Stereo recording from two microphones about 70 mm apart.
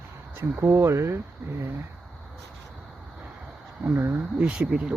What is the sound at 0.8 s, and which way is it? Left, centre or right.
Speech, right.